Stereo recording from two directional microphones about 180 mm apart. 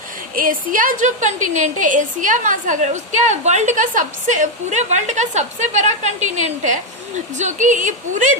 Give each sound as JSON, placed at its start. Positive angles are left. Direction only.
{"t": 0.3, "sound": "a woman's voice", "side_deg": -50}